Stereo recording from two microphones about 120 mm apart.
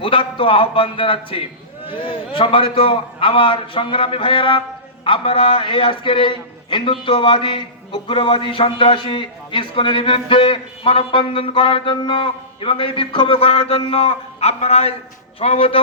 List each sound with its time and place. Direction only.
0.0 s a man's voice: 50° left (ahead or behind)